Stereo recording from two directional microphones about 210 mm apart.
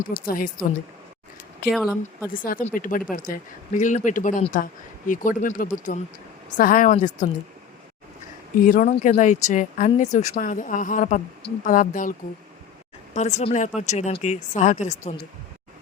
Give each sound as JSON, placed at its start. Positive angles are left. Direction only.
{"t": 0.0, "sound": "speech", "side_deg": 40}
{"t": 1.6, "sound": "speech", "side_deg": 45}
{"t": 8.5, "sound": "speech", "side_deg": 40}
{"t": 13.1, "sound": "speech", "side_deg": 30}